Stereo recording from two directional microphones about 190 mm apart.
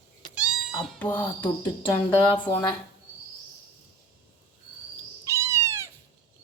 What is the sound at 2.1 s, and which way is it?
Speech, 10° left (ahead or behind).